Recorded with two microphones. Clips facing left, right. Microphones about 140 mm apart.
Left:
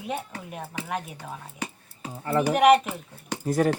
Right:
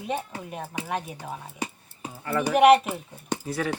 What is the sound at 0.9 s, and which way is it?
Speech, centre (ahead or behind).